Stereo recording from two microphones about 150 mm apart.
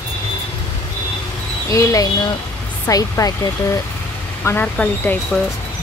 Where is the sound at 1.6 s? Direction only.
20° left (ahead or behind).